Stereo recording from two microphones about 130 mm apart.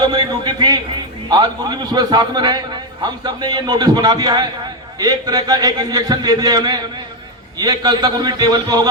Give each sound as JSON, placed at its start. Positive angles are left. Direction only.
{"t": 0.0, "sound": "a man's voice", "side_deg": -35}